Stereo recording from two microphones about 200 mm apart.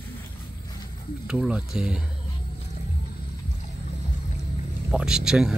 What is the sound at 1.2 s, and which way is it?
Speech, 5° right (ahead or behind).